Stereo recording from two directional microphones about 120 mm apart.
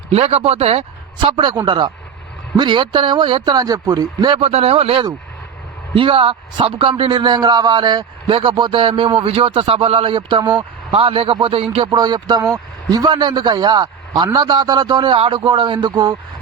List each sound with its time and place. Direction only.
0.1 s speech: 55° right (ahead or behind)
1.2 s speech: 40° right (ahead or behind)
4.4 s a man's voice: 55° right (ahead or behind)
11.9 s speech: 35° right (ahead or behind)